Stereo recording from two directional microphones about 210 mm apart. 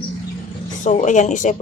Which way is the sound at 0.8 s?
35° left (ahead or behind).